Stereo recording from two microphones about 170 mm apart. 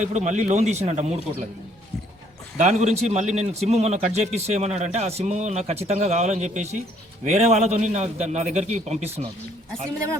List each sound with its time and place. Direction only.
0.0 s a man's voice: 45° right (ahead or behind)
2.6 s a man's voice: 40° right (ahead or behind)